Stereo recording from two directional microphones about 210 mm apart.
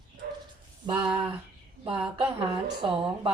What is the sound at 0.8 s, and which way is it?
Speech, 20° right (ahead or behind).